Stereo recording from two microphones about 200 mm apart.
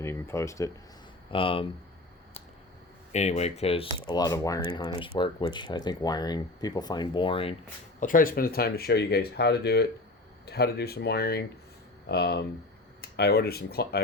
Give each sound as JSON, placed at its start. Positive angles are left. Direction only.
{"t": 0.0, "sound": "speech", "side_deg": 10}
{"t": 1.3, "sound": "speech", "side_deg": 25}
{"t": 3.1, "sound": "speech", "side_deg": 35}
{"t": 7.9, "sound": "speech", "side_deg": 40}